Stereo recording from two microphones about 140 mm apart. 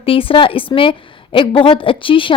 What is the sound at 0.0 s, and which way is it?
A woman's voice, 40° left (ahead or behind).